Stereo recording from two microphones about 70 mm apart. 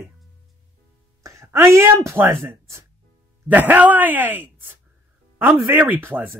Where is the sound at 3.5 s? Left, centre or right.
Right.